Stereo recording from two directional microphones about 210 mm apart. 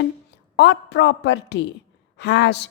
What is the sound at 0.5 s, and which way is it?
A woman's voice, 55° left (ahead or behind).